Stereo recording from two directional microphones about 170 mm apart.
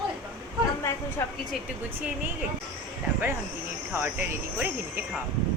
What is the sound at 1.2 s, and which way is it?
Speech, 15° left (ahead or behind).